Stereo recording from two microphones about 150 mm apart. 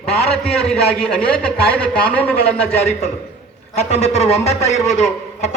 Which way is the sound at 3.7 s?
45° left (ahead or behind).